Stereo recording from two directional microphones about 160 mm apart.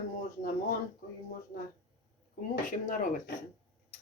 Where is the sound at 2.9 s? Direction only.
55° left (ahead or behind).